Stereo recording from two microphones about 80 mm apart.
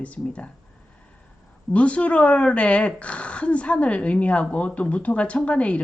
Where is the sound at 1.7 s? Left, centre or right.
Centre.